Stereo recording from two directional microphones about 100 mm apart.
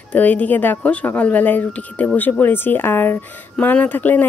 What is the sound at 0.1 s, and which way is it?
Speech, 15° left (ahead or behind).